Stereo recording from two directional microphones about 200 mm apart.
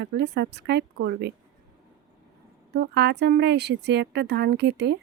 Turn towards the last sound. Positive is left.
turn(degrees=-60)  # may be behind; listen again after turning